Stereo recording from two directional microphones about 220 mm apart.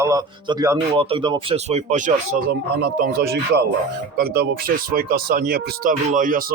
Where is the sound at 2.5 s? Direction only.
45° right (ahead or behind).